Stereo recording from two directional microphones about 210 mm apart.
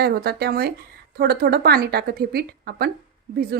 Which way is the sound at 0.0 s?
50° right (ahead or behind).